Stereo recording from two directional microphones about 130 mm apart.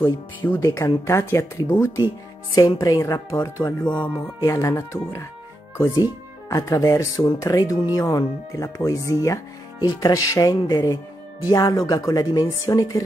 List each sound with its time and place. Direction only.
0.0 s speech: 20° left (ahead or behind)
3.8 s speech: 10° left (ahead or behind)
4.4 s speech: 25° left (ahead or behind)
6.5 s speech: 25° left (ahead or behind)